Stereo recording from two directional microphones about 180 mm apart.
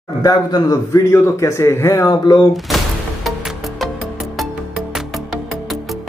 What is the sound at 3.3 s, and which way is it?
Music, centre (ahead or behind).